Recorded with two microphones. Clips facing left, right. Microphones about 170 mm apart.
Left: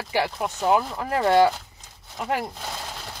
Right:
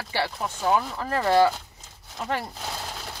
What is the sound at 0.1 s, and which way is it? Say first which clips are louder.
Speech: left 3 dB; 15° left (ahead or behind).